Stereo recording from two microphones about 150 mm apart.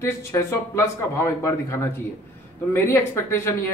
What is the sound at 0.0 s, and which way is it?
A man's voice, 20° left (ahead or behind).